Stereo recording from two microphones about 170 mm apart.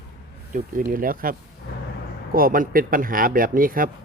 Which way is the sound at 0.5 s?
60° right (ahead or behind).